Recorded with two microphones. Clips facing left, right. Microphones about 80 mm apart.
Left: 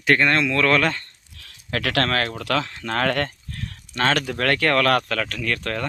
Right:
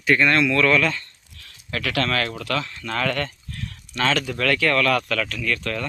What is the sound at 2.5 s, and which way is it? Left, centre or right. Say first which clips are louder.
Speech: left 3 dB; left.